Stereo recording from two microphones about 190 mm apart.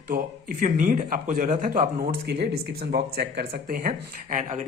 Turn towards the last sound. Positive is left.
turn(degrees=-40)  # may be behind; listen again after turning